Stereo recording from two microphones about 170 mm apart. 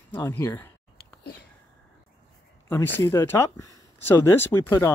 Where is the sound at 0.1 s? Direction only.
15° left (ahead or behind).